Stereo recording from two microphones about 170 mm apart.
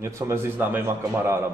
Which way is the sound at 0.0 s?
15° right (ahead or behind).